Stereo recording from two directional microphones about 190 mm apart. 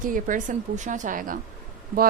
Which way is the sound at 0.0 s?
45° right (ahead or behind).